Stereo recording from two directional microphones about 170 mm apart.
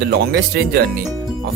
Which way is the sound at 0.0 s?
75° right (ahead or behind).